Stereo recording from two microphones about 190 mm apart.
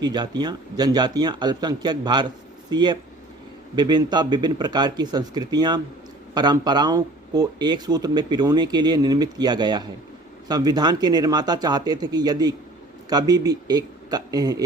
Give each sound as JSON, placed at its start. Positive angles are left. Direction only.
{"t": 0.0, "sound": "speech", "side_deg": -20}